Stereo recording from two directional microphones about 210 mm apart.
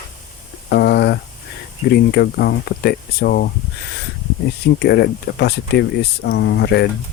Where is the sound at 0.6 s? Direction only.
50° left (ahead or behind).